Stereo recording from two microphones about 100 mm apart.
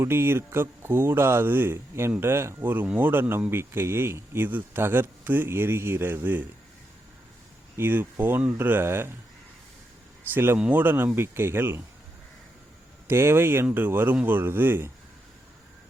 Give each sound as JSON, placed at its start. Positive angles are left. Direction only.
{"t": 0.0, "sound": "speech", "side_deg": -25}
{"t": 7.8, "sound": "speech", "side_deg": -20}
{"t": 10.3, "sound": "speech", "side_deg": -20}
{"t": 13.1, "sound": "speech", "side_deg": -25}